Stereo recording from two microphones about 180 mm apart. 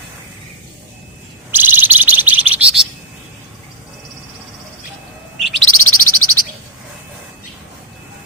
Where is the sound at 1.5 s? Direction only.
10° right (ahead or behind).